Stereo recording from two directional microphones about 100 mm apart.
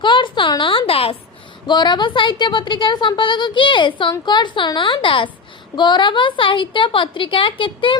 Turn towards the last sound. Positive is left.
turn(degrees=55)  # may be behind; listen again after turning